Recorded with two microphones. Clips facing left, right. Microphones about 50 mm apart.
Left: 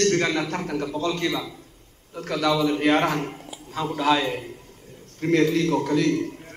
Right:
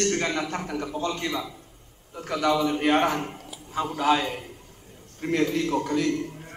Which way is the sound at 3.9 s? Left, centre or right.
Left.